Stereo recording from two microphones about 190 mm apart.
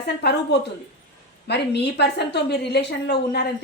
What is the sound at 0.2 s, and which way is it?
A woman's voice, 60° left (ahead or behind).